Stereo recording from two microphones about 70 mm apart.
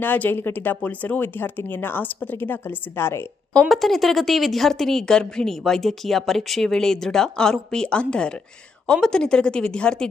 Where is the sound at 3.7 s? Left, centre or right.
Centre.